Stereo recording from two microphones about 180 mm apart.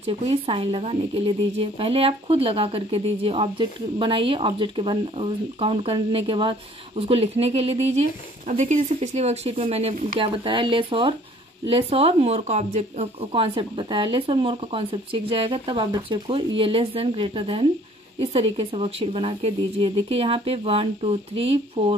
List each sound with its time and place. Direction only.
0.0 s speech: 30° right (ahead or behind)